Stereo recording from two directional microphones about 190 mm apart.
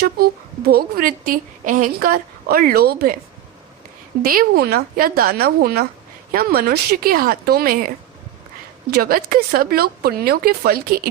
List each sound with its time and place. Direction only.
0.0 s a woman's voice: 55° right (ahead or behind)
4.2 s a woman's voice: 50° right (ahead or behind)
8.9 s a woman's voice: 50° right (ahead or behind)